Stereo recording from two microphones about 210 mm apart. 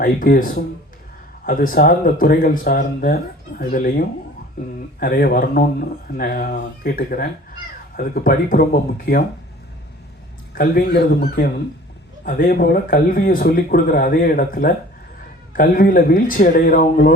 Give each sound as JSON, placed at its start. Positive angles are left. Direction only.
{"t": 0.0, "sound": "a man's voice", "side_deg": 45}
{"t": 10.5, "sound": "a man's voice", "side_deg": 45}